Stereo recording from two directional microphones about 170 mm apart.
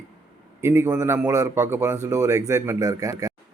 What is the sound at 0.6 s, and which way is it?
A man's voice, 15° right (ahead or behind).